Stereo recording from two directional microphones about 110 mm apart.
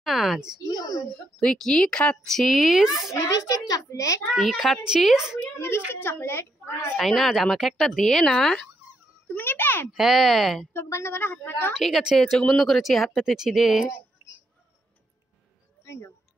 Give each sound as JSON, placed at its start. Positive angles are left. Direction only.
{"t": 0.0, "sound": "a sound", "side_deg": 0}
{"t": 0.7, "sound": "a sound", "side_deg": 35}
{"t": 1.1, "sound": "speech", "side_deg": 5}
{"t": 3.2, "sound": "speech", "side_deg": 30}
{"t": 4.3, "sound": "speech", "side_deg": 0}
{"t": 5.4, "sound": "a sound", "side_deg": 25}
{"t": 6.0, "sound": "a woman's voice", "side_deg": 20}
{"t": 7.0, "sound": "speech", "side_deg": 0}
{"t": 9.3, "sound": "a woman's voice", "side_deg": 20}
{"t": 9.9, "sound": "speech", "side_deg": 0}
{"t": 10.7, "sound": "a woman's voice", "side_deg": 25}
{"t": 11.7, "sound": "speech", "side_deg": 0}
{"t": 15.8, "sound": "a sound", "side_deg": 25}